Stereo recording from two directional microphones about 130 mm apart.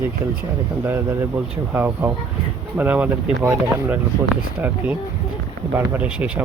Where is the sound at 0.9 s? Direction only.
20° right (ahead or behind).